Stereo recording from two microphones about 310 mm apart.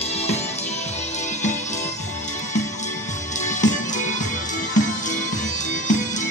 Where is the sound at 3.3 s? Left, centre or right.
Left.